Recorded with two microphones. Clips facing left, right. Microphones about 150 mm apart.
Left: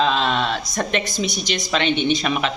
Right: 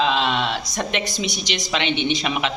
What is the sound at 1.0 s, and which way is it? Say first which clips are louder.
Speech: left 2 dB; 45° left (ahead or behind).